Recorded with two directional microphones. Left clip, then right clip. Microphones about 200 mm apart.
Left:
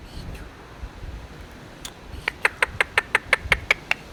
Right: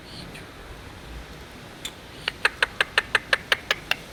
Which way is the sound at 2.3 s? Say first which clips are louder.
Left 1 dB; 25° left (ahead or behind).